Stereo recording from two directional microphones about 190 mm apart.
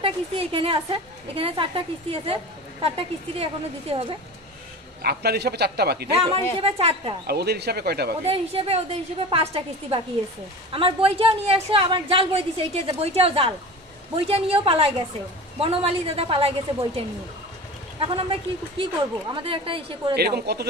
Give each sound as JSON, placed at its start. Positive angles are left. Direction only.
{"t": 0.0, "sound": "a woman's voice", "side_deg": -30}
{"t": 5.0, "sound": "a man's voice", "side_deg": -55}
{"t": 6.1, "sound": "a woman's voice", "side_deg": -30}
{"t": 7.2, "sound": "a man's voice", "side_deg": -60}
{"t": 8.3, "sound": "a woman's voice", "side_deg": -30}
{"t": 20.2, "sound": "a man's voice", "side_deg": -55}